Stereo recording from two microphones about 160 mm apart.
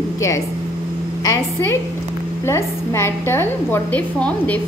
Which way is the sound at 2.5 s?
15° left (ahead or behind).